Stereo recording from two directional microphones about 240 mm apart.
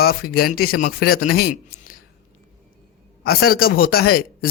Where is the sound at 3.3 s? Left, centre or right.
Left.